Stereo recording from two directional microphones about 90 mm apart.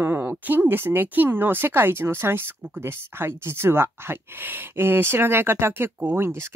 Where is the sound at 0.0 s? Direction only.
20° right (ahead or behind).